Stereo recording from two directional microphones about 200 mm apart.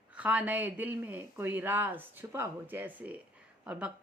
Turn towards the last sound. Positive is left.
turn(degrees=-5)  # may be behind; listen again after turning